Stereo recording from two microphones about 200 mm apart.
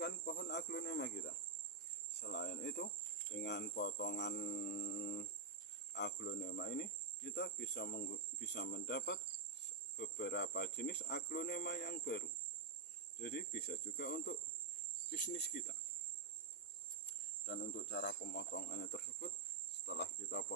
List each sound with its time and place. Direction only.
0.0 s cricket: 55° left (ahead or behind)
17.4 s cricket: 60° left (ahead or behind)